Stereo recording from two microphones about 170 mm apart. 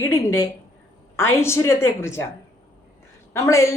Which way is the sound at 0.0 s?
15° left (ahead or behind).